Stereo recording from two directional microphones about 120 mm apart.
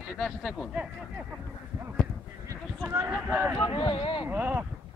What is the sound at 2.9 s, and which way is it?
Speech, 20° right (ahead or behind).